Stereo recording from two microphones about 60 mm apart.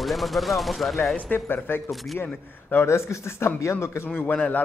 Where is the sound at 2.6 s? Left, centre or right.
Left.